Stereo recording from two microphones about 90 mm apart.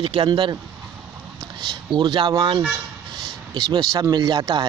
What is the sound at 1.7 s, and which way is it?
Speech, 60° right (ahead or behind).